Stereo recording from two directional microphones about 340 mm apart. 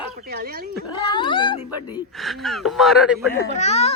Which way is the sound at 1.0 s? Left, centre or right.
Centre.